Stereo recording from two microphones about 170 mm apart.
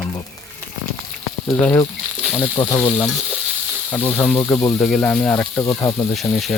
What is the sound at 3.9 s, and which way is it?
Speech, 10° left (ahead or behind).